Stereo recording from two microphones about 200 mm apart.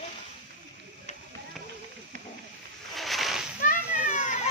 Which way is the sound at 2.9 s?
Centre (ahead or behind).